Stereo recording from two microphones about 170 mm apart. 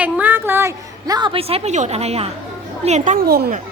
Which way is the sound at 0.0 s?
10° right (ahead or behind).